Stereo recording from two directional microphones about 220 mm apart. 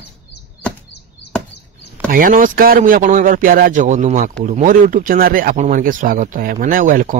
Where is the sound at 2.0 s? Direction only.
40° right (ahead or behind).